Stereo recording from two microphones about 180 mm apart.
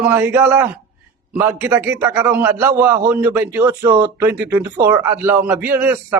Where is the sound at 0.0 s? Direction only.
10° right (ahead or behind).